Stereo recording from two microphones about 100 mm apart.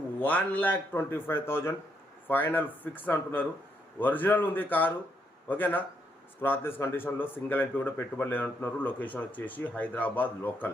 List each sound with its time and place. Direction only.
0.2 s a man's voice: 15° left (ahead or behind)